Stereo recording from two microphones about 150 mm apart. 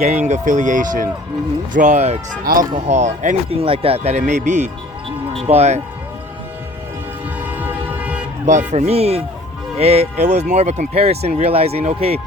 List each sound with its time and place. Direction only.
0.0 s speech: 50° right (ahead or behind)
2.4 s speech: 75° right (ahead or behind)
2.7 s speech: 50° right (ahead or behind)
3.5 s speech: 40° right (ahead or behind)
7.3 s train: 10° right (ahead or behind)
8.4 s speech: 50° right (ahead or behind)